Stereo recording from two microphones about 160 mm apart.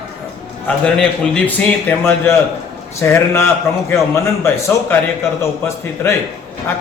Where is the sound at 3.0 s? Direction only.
15° left (ahead or behind).